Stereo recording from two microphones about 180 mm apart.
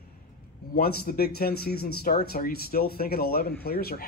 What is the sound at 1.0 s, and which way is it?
Speech, 60° left (ahead or behind).